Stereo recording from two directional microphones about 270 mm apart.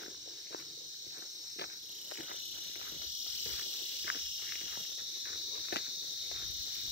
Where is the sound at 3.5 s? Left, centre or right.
Left.